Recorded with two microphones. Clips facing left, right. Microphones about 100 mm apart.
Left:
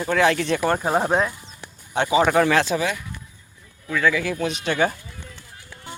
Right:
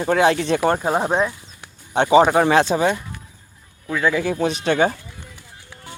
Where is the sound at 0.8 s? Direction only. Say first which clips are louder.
Right 1 dB; 5° right (ahead or behind).